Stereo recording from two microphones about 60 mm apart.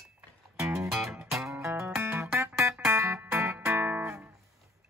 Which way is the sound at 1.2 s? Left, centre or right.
Centre.